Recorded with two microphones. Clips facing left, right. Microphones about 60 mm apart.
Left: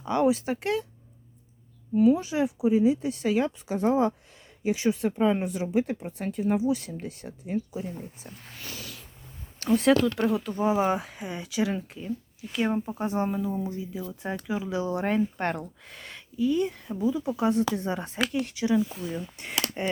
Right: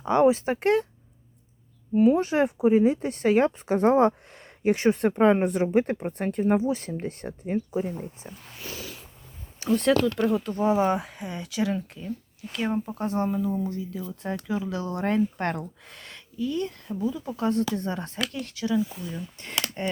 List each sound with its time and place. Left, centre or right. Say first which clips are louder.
0.0 s speech: right 4 dB; right
2.0 s speech: right 2 dB; right
8.2 s a sound: right 2 dB; right
9.6 s speech: even; centre